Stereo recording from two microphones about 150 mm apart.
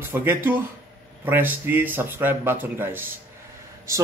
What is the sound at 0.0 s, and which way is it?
A man's voice, 15° right (ahead or behind).